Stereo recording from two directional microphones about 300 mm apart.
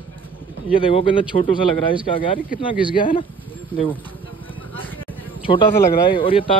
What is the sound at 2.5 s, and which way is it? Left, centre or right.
Speech, centre.